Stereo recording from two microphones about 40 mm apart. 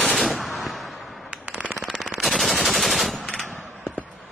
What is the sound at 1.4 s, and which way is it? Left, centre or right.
Machine gun, right.